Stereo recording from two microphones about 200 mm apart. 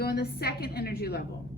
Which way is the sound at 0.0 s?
50° left (ahead or behind).